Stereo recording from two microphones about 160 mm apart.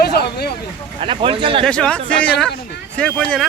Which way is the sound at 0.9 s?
35° right (ahead or behind).